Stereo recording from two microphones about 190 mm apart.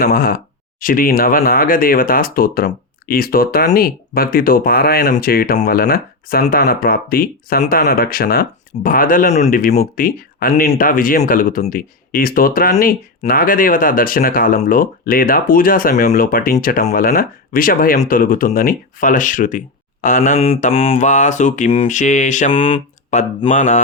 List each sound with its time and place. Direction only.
0.0 s speech: 50° left (ahead or behind)
20.4 s mantra: 30° left (ahead or behind)
20.9 s mantra: 40° left (ahead or behind)
22.5 s speech: 30° left (ahead or behind)
23.5 s mantra: 40° left (ahead or behind)